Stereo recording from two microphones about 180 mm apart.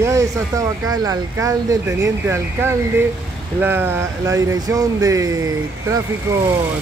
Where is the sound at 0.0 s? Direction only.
15° right (ahead or behind).